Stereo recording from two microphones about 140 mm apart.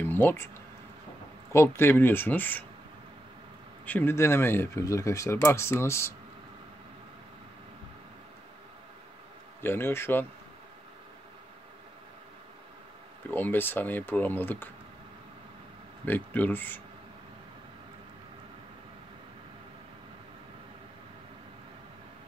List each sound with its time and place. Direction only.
0.0 s a sound: 15° left (ahead or behind)
1.5 s speech: 20° left (ahead or behind)
3.8 s speech: 15° left (ahead or behind)
9.6 s speech: 15° left (ahead or behind)
13.3 s speech: 15° left (ahead or behind)
16.1 s speech: 10° left (ahead or behind)